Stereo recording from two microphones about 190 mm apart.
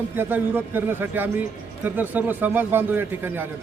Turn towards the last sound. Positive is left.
turn(degrees=-10)  # may be behind; listen again after turning